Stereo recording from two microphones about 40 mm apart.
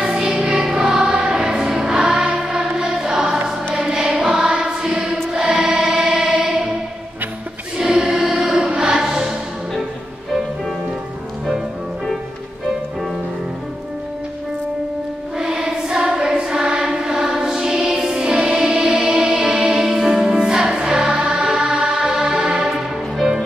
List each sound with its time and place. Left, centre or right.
0.0 s choir: centre
7.7 s choir: centre
15.3 s choir: centre
16.9 s music: centre
23.2 s music: centre